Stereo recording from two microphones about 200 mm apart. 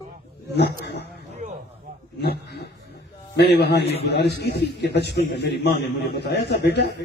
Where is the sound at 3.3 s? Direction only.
55° left (ahead or behind).